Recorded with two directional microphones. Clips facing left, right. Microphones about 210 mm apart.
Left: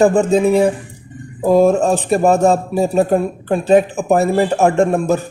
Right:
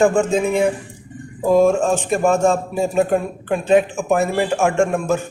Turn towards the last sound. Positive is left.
turn(degrees=35)  # may be behind; listen again after turning